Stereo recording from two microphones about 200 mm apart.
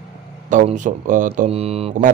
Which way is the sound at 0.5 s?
40° right (ahead or behind).